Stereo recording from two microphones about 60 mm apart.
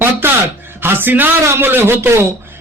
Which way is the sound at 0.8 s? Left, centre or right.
Right.